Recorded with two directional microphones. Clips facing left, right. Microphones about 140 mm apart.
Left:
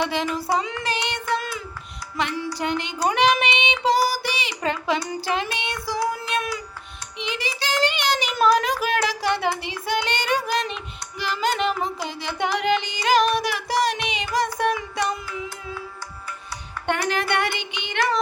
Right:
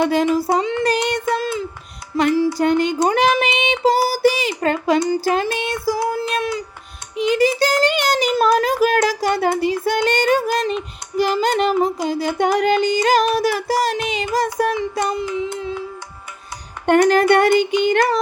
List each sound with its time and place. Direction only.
0.0 s a sound: 45° right (ahead or behind)
0.5 s child singing: 30° right (ahead or behind)
2.1 s music: 35° right (ahead or behind)
3.0 s a sound: 35° right (ahead or behind)
5.2 s music: 40° right (ahead or behind)
6.0 s child singing: 30° right (ahead or behind)
7.2 s child singing: 40° right (ahead or behind)
15.2 s child singing: 20° right (ahead or behind)
16.8 s a sound: 45° right (ahead or behind)